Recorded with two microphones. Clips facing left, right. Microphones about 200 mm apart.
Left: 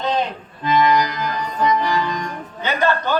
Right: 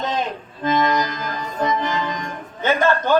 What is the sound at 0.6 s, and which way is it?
Music, 45° right (ahead or behind).